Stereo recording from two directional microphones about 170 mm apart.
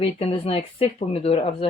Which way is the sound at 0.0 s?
35° left (ahead or behind).